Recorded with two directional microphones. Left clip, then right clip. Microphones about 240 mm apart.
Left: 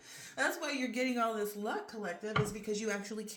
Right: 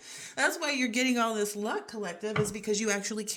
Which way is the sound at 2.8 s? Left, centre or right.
Right.